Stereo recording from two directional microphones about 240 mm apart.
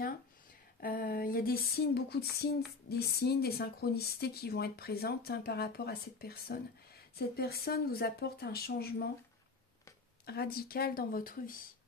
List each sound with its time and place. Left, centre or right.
0.7 s a sound: left
3.0 s speech: left
10.2 s speech: left